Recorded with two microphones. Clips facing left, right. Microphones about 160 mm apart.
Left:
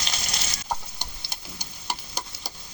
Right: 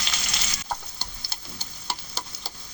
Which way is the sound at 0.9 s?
15° left (ahead or behind).